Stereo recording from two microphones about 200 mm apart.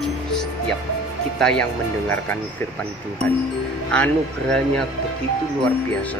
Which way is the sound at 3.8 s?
5° left (ahead or behind).